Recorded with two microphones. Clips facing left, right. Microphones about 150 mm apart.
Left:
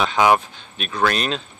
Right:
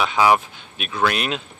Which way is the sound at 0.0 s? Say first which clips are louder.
Left 1 dB; 5° right (ahead or behind).